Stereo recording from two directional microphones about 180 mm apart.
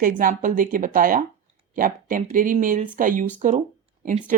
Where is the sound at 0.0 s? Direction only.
50° right (ahead or behind).